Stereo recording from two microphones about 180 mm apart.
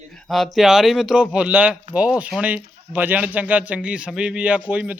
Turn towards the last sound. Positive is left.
turn(degrees=-5)  # may be behind; listen again after turning